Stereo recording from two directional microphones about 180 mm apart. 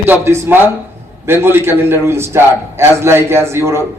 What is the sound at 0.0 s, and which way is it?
A man's voice, 15° right (ahead or behind).